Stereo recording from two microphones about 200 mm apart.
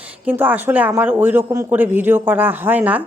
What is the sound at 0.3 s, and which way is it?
Speech, 10° right (ahead or behind).